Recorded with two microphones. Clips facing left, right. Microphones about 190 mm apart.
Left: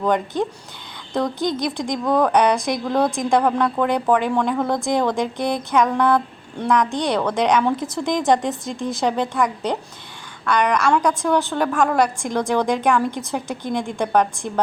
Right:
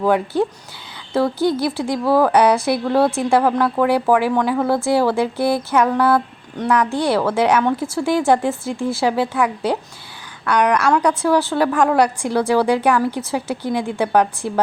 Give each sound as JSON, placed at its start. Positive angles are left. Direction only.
{"t": 0.0, "sound": "a woman's voice", "side_deg": -5}
{"t": 8.7, "sound": "speech", "side_deg": 15}
{"t": 9.0, "sound": "a woman's voice", "side_deg": -5}